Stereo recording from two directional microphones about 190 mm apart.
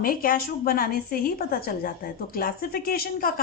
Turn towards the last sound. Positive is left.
turn(degrees=50)  # may be behind; listen again after turning